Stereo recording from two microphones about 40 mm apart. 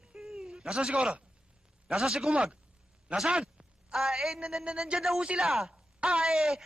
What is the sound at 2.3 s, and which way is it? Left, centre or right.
Speech, right.